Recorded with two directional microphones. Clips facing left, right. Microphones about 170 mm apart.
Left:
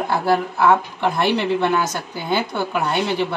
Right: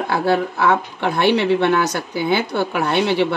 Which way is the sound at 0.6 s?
75° right (ahead or behind).